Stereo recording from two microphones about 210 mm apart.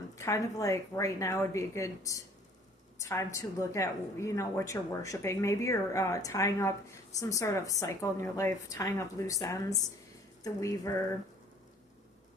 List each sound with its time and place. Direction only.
0.2 s a woman's voice: 15° left (ahead or behind)